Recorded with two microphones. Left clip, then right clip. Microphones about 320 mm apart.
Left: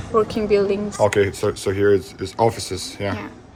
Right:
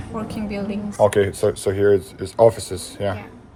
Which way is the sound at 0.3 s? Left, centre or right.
Left.